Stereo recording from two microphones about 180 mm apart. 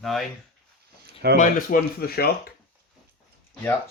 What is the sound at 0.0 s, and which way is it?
Speech, centre (ahead or behind).